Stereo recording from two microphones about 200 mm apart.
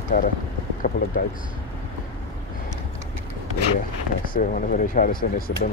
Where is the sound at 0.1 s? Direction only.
40° left (ahead or behind).